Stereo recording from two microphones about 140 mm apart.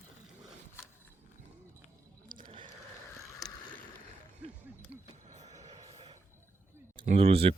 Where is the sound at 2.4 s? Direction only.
40° right (ahead or behind).